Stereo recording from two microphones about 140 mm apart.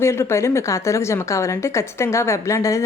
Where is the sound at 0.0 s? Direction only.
20° left (ahead or behind).